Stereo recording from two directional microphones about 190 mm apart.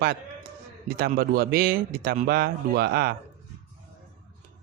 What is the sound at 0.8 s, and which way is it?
Speech, 50° right (ahead or behind).